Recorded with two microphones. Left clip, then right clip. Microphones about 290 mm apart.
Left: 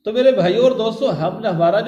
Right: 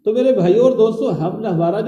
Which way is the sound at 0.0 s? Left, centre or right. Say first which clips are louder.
Even; left.